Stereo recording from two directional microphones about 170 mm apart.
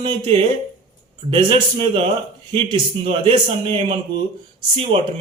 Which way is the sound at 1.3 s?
30° right (ahead or behind).